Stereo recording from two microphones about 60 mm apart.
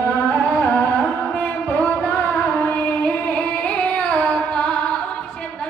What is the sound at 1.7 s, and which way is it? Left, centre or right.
Music, left.